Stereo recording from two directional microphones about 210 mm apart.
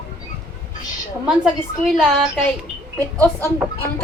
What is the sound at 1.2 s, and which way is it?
A woman's voice, centre (ahead or behind).